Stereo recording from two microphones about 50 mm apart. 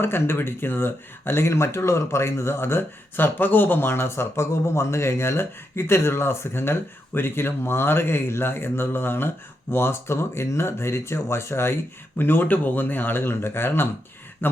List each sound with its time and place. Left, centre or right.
0.0 s speech: left